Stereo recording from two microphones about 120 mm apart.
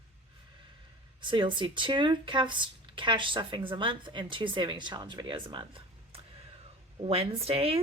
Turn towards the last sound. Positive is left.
turn(degrees=-55)  # may be behind; listen again after turning